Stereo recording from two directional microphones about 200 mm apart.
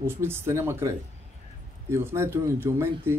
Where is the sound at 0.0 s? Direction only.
10° right (ahead or behind).